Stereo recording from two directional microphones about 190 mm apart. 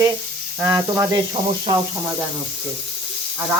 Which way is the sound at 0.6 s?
15° right (ahead or behind).